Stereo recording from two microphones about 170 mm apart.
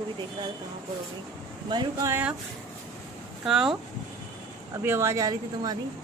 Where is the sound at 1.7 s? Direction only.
25° right (ahead or behind).